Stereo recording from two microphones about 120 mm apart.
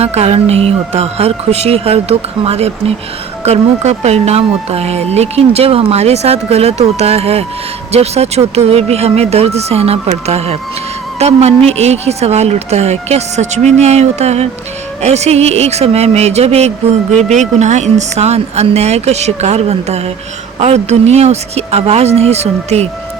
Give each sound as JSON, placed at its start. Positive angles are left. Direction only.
{"t": 0.0, "sound": "speech", "side_deg": -60}